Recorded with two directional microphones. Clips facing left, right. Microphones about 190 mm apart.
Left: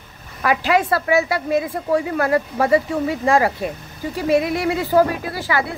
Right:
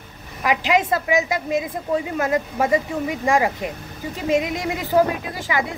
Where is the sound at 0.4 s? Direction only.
15° right (ahead or behind).